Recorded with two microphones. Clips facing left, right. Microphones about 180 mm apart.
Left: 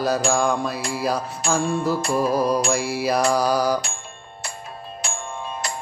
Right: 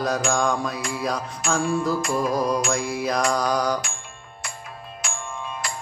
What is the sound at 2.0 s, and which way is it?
Mantra, 30° left (ahead or behind).